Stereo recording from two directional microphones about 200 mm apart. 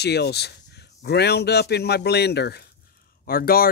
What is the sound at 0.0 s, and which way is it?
Speech, 55° left (ahead or behind).